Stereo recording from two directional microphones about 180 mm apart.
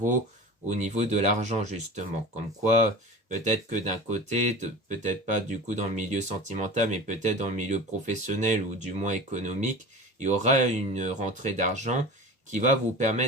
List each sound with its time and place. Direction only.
0.7 s speech: 40° right (ahead or behind)